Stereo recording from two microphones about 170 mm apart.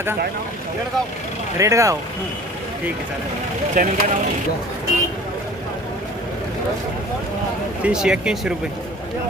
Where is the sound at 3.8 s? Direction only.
50° right (ahead or behind).